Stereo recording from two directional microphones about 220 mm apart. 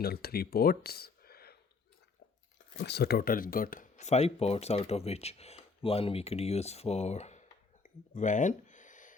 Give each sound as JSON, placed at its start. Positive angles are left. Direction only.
{"t": 0.0, "sound": "speech", "side_deg": 45}
{"t": 2.7, "sound": "speech", "side_deg": 50}
{"t": 8.1, "sound": "a sound", "side_deg": 35}